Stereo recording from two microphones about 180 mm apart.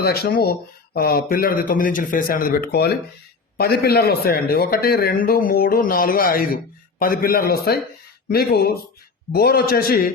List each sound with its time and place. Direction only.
0.0 s a man's voice: 60° left (ahead or behind)